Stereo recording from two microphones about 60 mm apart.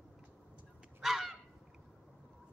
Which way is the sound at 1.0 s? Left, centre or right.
Centre.